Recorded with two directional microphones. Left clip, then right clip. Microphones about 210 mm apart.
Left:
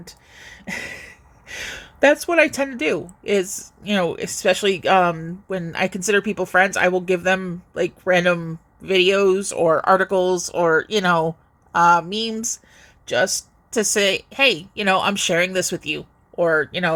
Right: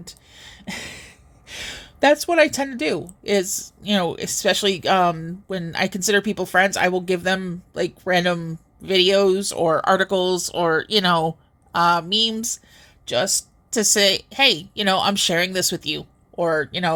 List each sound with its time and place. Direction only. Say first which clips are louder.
0.3 s speech: left 3 dB; 15° right (ahead or behind)
13.1 s speech: left 2 dB; 15° right (ahead or behind)